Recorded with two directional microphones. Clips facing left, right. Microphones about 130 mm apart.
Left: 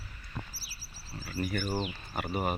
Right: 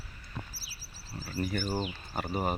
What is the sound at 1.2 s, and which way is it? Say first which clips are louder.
Speech: even; 30° right (ahead or behind).